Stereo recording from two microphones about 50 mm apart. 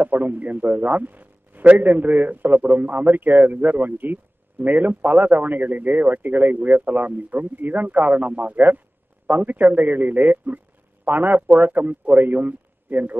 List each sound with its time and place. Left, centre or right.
0.0 s a man's voice: right